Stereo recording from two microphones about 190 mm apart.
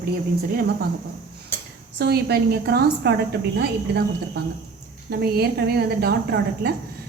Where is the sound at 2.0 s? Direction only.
55° right (ahead or behind).